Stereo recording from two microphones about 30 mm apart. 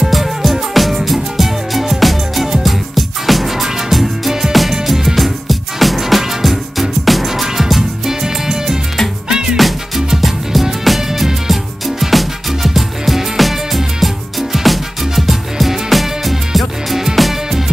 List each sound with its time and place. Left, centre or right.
0.1 s music: centre; by 9.6 s right
9.9 s music: centre
12.0 s music: centre